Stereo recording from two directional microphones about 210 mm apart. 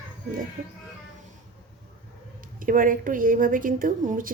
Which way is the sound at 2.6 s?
40° right (ahead or behind).